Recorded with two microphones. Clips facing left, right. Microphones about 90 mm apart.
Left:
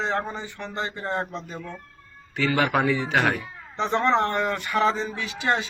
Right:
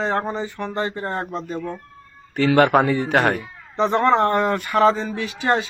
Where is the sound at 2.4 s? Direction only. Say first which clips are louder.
Right 7 dB; 55° right (ahead or behind); by 5.7 s 40° right (ahead or behind).